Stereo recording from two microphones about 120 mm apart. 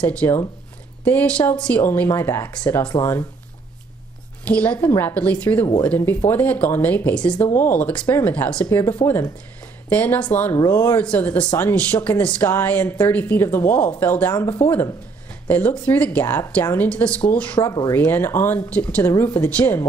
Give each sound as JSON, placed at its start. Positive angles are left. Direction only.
{"t": 0.0, "sound": "speech", "side_deg": 10}
{"t": 2.6, "sound": "speech", "side_deg": 10}
{"t": 4.5, "sound": "speech", "side_deg": 10}
{"t": 17.6, "sound": "speech", "side_deg": 30}
{"t": 17.9, "sound": "speech", "side_deg": 15}